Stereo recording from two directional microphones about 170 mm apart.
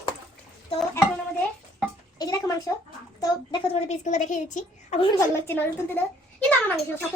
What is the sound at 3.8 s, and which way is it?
A woman's voice, 45° left (ahead or behind).